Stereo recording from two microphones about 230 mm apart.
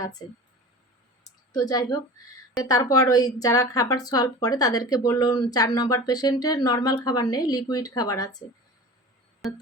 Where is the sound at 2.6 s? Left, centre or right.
Centre.